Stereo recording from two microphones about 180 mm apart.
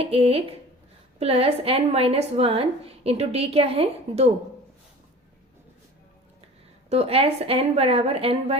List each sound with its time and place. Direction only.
0.0 s a woman's voice: 35° right (ahead or behind)
6.9 s a woman's voice: 35° right (ahead or behind)